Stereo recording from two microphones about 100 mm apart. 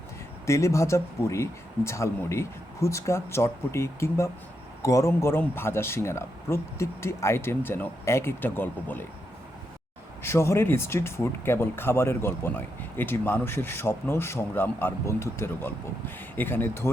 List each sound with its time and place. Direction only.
0.4 s speech: 30° left (ahead or behind)
10.2 s speech: 30° left (ahead or behind)